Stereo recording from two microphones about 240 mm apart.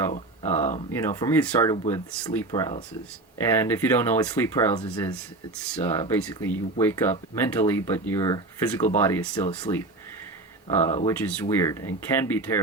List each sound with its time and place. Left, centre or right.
0.9 s speech: centre
10.8 s speech: left
11.0 s speech: centre